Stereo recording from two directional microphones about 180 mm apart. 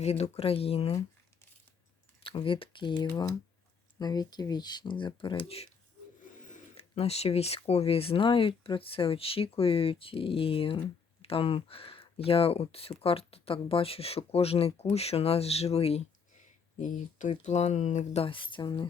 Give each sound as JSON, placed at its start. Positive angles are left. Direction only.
{"t": 0.0, "sound": "speech", "side_deg": 35}
{"t": 2.2, "sound": "speech", "side_deg": 30}
{"t": 3.9, "sound": "speech", "side_deg": 20}
{"t": 6.4, "sound": "speech", "side_deg": 45}